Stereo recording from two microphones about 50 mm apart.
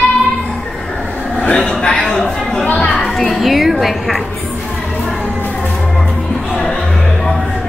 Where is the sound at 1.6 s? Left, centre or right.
Centre.